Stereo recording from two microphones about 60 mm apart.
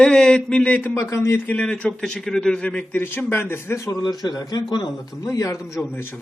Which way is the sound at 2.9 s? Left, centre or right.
Left.